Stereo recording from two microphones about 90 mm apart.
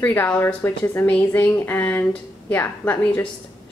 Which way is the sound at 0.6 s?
30° left (ahead or behind).